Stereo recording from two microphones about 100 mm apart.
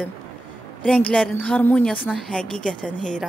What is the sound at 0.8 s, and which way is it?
A woman's voice, 10° left (ahead or behind).